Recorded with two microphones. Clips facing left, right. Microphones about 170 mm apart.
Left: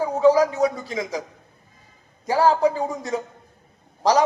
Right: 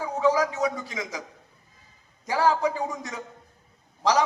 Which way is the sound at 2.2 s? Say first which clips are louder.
Left 5 dB; 35° left (ahead or behind).